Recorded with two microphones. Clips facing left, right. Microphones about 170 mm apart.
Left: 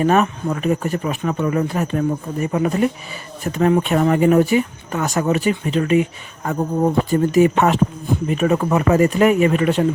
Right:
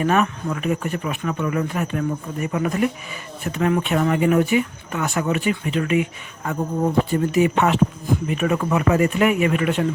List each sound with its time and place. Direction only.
0.0 s speech: 35° left (ahead or behind)